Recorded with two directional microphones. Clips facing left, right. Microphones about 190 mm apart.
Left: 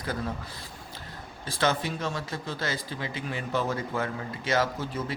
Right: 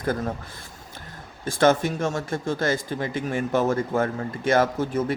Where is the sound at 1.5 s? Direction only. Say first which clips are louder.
Right 8 dB; 50° right (ahead or behind).